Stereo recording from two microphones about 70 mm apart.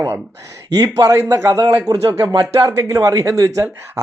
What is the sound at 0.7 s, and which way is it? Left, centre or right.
Speech, right.